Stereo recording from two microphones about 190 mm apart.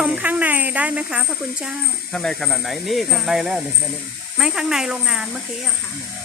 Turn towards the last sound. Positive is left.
turn(degrees=-5)  # may be behind; listen again after turning